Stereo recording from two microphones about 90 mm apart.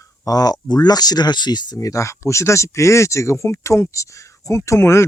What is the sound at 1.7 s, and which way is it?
Speech, 35° left (ahead or behind).